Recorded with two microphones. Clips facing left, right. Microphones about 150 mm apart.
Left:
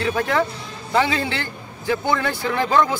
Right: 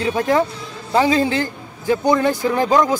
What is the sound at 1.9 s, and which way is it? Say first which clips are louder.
Speech: right 5 dB; 20° right (ahead or behind).